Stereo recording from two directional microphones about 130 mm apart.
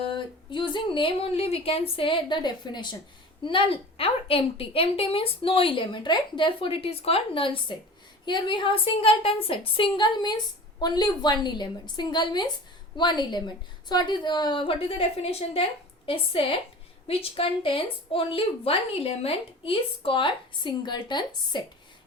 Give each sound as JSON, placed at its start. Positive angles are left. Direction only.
{"t": 0.0, "sound": "a woman's voice", "side_deg": 40}